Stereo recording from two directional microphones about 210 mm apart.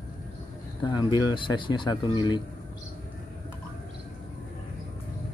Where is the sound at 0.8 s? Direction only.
20° left (ahead or behind).